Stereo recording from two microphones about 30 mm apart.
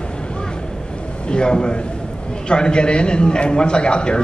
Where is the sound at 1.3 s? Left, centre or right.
Left.